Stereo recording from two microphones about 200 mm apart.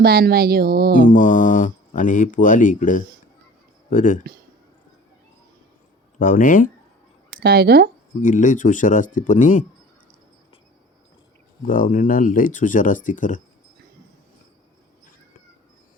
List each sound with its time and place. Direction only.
0.0 s speech: 50° right (ahead or behind)
1.0 s speech: 40° left (ahead or behind)
6.1 s speech: 40° left (ahead or behind)
7.4 s speech: 55° right (ahead or behind)
8.2 s speech: 40° left (ahead or behind)
11.6 s speech: 45° left (ahead or behind)